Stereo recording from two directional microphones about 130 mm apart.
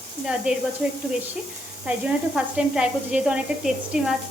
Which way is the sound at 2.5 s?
5° right (ahead or behind).